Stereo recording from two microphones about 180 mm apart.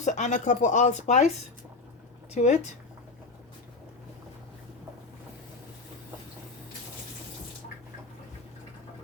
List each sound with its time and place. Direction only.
0.0 s speech: 45° left (ahead or behind)
2.3 s speech: 40° left (ahead or behind)